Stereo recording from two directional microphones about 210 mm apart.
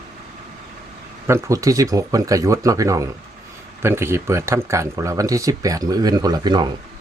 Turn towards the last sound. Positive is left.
turn(degrees=-20)  # may be behind; listen again after turning